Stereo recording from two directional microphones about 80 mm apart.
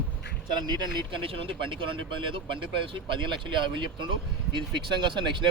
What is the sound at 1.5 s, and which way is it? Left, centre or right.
Speech, right.